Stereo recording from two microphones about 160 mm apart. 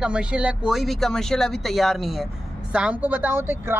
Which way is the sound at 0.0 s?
5° right (ahead or behind).